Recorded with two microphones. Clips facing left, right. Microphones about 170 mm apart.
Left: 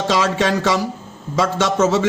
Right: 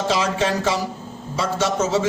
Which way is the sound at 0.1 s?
75° left (ahead or behind).